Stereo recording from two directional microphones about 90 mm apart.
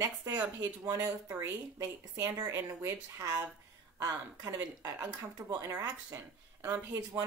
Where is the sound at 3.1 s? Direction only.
40° right (ahead or behind).